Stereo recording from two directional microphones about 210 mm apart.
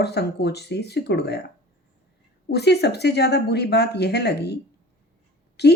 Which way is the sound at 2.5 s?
50° left (ahead or behind).